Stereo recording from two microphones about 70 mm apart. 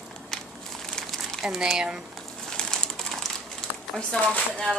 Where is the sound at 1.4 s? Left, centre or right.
Centre.